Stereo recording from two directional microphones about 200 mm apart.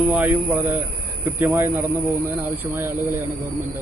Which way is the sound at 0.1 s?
10° right (ahead or behind).